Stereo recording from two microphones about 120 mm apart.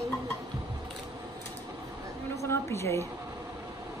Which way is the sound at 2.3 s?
25° left (ahead or behind).